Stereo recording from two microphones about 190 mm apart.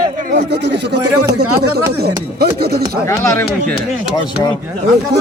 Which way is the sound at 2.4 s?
55° right (ahead or behind).